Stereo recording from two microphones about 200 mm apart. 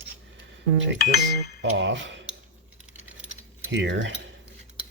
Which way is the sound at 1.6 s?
65° right (ahead or behind).